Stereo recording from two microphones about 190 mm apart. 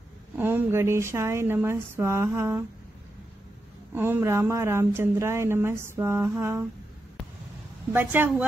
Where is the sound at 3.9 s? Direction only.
10° right (ahead or behind).